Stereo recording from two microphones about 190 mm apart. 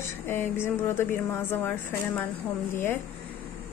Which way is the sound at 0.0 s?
10° left (ahead or behind).